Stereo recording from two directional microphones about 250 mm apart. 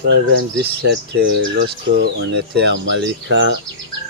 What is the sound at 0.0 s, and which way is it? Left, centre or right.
Speech, right.